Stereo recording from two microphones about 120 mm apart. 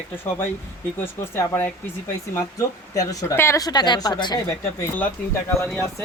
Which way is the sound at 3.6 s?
35° left (ahead or behind).